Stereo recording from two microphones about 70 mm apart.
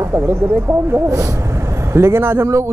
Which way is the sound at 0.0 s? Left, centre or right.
Right.